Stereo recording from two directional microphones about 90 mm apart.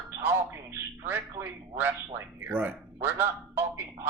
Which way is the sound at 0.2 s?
20° right (ahead or behind).